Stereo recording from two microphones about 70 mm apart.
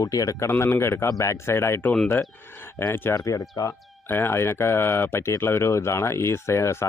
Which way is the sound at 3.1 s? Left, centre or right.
Left.